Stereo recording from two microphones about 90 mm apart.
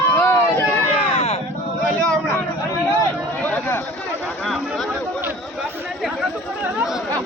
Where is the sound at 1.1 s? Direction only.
90° left.